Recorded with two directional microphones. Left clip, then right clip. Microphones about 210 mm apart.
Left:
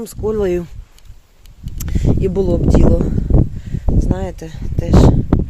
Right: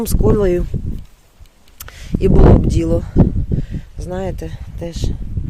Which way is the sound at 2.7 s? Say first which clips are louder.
Left 3 dB; 10° right (ahead or behind).